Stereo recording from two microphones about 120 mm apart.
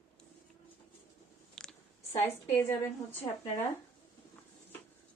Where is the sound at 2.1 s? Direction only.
20° left (ahead or behind).